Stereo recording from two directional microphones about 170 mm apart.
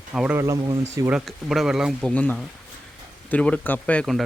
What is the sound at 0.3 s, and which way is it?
Speech, 20° right (ahead or behind).